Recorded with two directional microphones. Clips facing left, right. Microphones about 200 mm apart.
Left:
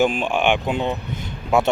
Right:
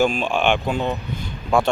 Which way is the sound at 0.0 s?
15° left (ahead or behind).